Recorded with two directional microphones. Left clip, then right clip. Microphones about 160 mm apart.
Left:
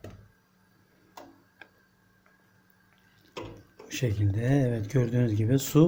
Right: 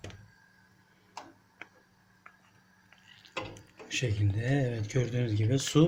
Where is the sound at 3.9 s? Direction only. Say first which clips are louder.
Left 1 dB; 20° left (ahead or behind).